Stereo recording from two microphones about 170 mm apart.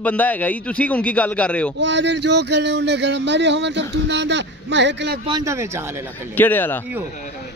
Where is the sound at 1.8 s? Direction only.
90° right.